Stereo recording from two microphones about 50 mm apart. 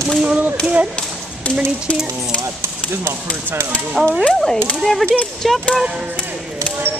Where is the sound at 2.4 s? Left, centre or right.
Right.